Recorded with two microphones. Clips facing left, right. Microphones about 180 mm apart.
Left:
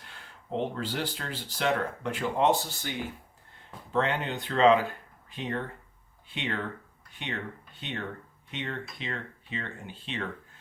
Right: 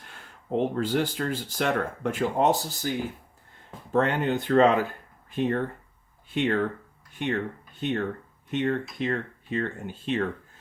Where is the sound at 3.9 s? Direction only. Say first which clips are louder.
Right 5 dB; 50° right (ahead or behind).